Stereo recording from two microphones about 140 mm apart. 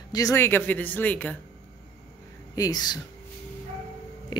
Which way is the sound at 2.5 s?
25° left (ahead or behind).